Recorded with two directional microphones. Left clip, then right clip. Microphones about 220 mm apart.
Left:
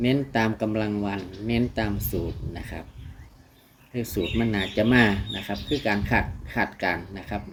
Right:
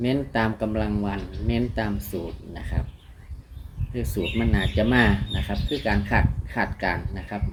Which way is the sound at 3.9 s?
15° left (ahead or behind).